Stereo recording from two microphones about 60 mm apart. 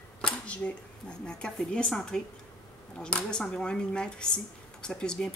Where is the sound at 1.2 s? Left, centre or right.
Centre.